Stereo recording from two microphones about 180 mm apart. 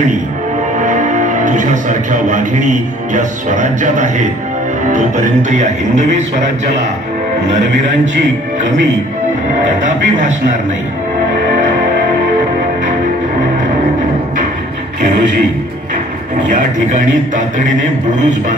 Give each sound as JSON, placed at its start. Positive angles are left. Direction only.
{"t": 0.7, "sound": "speech", "side_deg": -45}
{"t": 9.8, "sound": "speech", "side_deg": -45}
{"t": 16.4, "sound": "speech", "side_deg": -45}